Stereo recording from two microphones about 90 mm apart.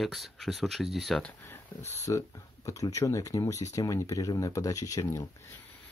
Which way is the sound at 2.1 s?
45° left (ahead or behind).